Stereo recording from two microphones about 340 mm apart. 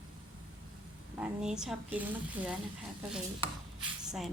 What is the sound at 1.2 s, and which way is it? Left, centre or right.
Speech, centre.